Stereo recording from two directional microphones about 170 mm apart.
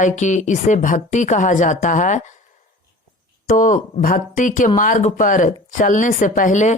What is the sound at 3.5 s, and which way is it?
A woman's voice, 50° left (ahead or behind).